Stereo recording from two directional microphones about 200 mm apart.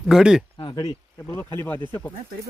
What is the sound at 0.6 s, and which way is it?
Speech, 25° left (ahead or behind).